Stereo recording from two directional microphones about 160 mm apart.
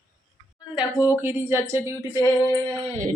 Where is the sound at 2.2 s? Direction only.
20° left (ahead or behind).